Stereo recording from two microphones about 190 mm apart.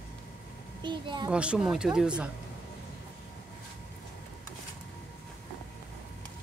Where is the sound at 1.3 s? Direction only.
5° right (ahead or behind).